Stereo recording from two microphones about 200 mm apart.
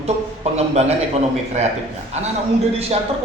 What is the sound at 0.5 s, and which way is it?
Speech, 35° right (ahead or behind).